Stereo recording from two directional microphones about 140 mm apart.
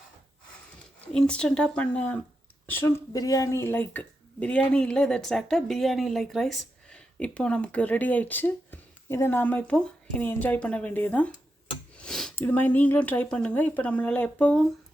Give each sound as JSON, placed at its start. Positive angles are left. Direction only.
{"t": 1.0, "sound": "speech", "side_deg": 5}
{"t": 12.0, "sound": "a sound", "side_deg": 5}
{"t": 12.4, "sound": "speech", "side_deg": 10}